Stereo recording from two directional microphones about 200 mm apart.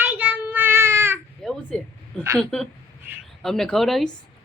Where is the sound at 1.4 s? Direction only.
5° left (ahead or behind).